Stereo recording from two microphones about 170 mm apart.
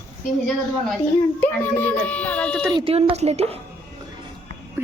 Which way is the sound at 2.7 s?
35° right (ahead or behind).